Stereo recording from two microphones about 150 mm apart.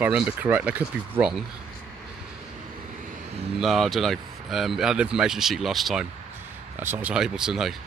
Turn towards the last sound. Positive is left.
turn(degrees=0)  # may be behind; listen again after turning